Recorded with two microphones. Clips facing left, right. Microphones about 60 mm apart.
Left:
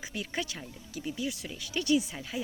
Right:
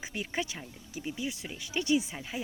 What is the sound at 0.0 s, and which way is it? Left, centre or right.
Speech, right.